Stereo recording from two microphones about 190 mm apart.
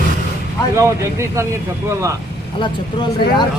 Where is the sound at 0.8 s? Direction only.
15° right (ahead or behind).